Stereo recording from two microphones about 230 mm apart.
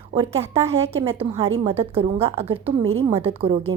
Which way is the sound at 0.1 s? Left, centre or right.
Right.